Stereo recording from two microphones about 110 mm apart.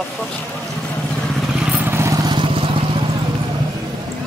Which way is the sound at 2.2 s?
50° right (ahead or behind).